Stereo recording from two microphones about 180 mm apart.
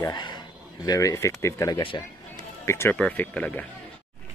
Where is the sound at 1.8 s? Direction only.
30° left (ahead or behind).